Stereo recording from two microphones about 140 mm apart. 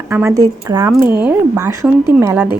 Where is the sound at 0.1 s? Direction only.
20° right (ahead or behind).